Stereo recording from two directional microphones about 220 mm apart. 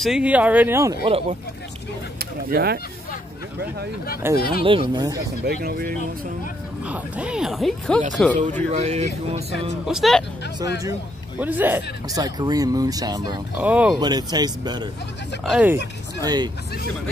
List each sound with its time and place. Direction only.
0.0 s a man's voice: 5° right (ahead or behind)
2.1 s speech: 45° right (ahead or behind)
4.4 s speech: 45° left (ahead or behind)
4.6 s speech: 20° right (ahead or behind)
5.4 s speech: 45° right (ahead or behind)
6.9 s speech: 5° right (ahead or behind)
8.7 s speech: 30° right (ahead or behind)
9.8 s speech: centre (ahead or behind)
10.8 s a man's voice: 10° right (ahead or behind)
13.6 s a man's voice: 5° right (ahead or behind)
13.9 s speech: 20° right (ahead or behind)
15.4 s speech: 5° right (ahead or behind)
16.2 s a man's voice: 15° right (ahead or behind)